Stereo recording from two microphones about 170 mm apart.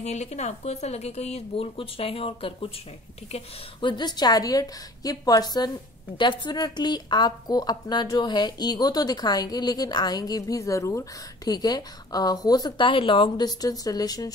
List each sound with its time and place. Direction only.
0.0 s a woman's voice: 40° left (ahead or behind); by 14.3 s 20° left (ahead or behind)